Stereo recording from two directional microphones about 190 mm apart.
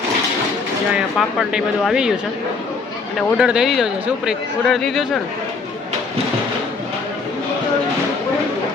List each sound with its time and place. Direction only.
0.9 s speech: 5° right (ahead or behind)
3.2 s speech: 5° right (ahead or behind)